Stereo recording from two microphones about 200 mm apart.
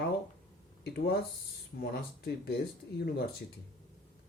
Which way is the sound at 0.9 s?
55° left (ahead or behind).